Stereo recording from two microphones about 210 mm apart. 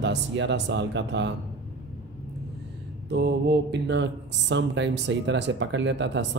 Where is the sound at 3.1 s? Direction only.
55° right (ahead or behind).